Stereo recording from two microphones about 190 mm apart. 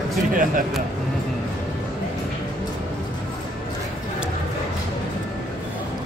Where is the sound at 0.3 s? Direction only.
45° right (ahead or behind).